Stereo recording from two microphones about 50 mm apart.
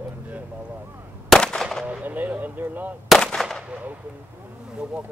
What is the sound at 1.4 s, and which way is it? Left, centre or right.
Gunshot, centre.